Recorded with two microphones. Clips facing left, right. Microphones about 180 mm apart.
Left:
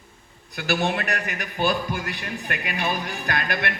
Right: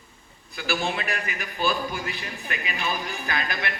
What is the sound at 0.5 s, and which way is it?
A man's voice, 55° left (ahead or behind).